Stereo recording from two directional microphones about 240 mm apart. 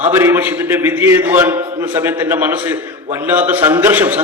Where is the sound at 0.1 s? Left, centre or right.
Centre.